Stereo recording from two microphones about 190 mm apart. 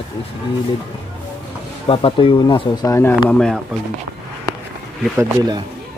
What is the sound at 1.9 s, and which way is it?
Speech, 25° left (ahead or behind).